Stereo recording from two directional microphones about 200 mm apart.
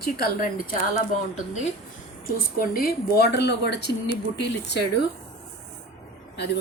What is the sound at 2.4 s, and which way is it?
Speech, 45° left (ahead or behind).